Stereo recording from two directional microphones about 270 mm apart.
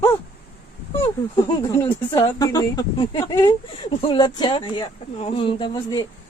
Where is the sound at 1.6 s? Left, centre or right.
Centre.